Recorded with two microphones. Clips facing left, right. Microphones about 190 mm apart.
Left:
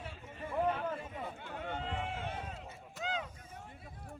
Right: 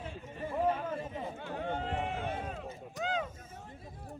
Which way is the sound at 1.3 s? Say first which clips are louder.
Right 5 dB; 40° right (ahead or behind).